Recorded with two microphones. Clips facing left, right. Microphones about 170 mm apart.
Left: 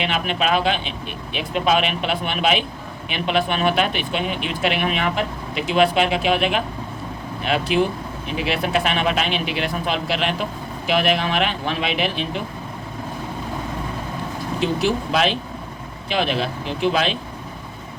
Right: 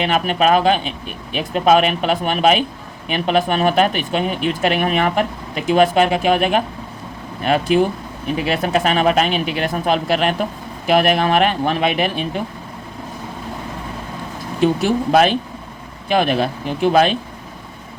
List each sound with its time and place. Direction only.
0.0 s speech: 45° right (ahead or behind)
14.6 s speech: 50° right (ahead or behind)